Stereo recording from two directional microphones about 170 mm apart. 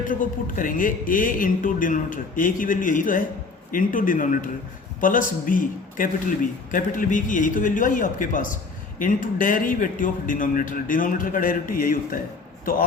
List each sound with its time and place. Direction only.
0.1 s a man's voice: 55° left (ahead or behind)